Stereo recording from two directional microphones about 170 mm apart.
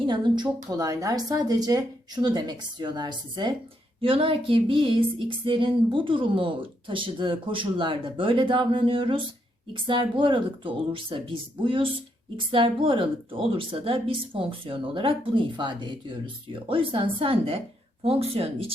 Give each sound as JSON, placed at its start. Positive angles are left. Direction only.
{"t": 0.0, "sound": "speech", "side_deg": -25}